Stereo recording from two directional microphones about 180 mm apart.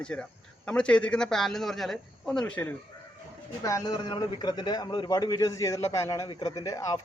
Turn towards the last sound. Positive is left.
turn(degrees=20)  # may be behind; listen again after turning